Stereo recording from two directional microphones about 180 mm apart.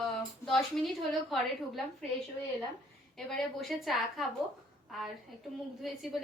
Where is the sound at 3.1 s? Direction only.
Centre (ahead or behind).